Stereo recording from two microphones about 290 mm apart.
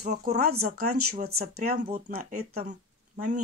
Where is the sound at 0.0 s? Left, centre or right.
Right.